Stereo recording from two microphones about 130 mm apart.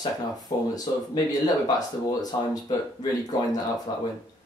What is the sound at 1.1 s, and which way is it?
Speech, 30° left (ahead or behind).